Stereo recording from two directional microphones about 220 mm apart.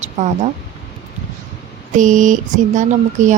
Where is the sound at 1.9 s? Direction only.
35° right (ahead or behind).